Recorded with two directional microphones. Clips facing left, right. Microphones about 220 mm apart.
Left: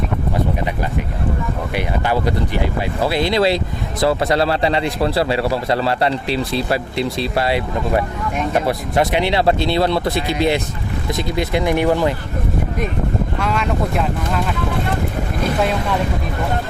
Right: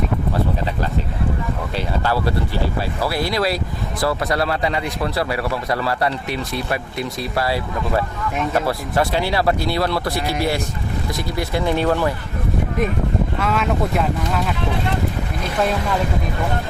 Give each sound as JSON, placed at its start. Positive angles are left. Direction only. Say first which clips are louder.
{"t": 1.7, "sound": "a man's voice", "louder": "left 2 dB", "side_deg": 20}
{"t": 13.4, "sound": "speech", "louder": "even", "side_deg": 0}